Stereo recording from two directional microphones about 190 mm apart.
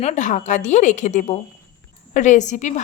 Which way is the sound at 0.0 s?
40° left (ahead or behind).